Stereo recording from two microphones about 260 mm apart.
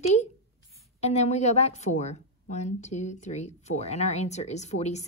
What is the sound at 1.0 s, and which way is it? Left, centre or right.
A woman's voice, left.